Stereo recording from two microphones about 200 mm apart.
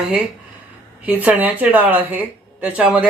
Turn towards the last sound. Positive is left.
turn(degrees=-5)  # may be behind; listen again after turning